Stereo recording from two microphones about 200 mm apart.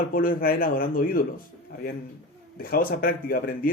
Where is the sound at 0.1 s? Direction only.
45° left (ahead or behind).